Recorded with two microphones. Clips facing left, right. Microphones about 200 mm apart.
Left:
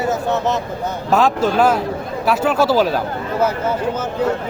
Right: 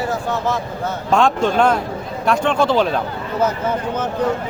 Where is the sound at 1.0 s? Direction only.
5° left (ahead or behind).